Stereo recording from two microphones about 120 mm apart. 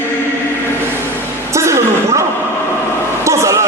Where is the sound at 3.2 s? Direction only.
25° right (ahead or behind).